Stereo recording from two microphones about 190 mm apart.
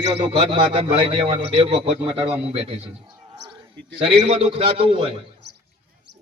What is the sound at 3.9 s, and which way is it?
A man's voice, 30° right (ahead or behind).